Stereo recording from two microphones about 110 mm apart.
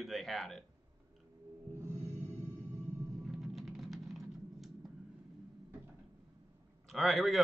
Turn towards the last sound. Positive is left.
turn(degrees=0)  # may be behind; listen again after turning